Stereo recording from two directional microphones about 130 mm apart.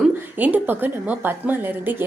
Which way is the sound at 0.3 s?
15° right (ahead or behind).